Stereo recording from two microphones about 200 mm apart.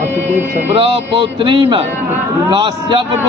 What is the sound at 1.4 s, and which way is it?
A man's voice, 25° right (ahead or behind).